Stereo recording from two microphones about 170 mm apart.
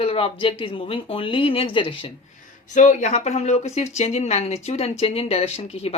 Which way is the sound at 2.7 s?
45° left (ahead or behind).